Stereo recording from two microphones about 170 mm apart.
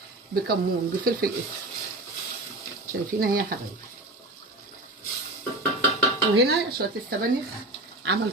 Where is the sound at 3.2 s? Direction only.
55° right (ahead or behind).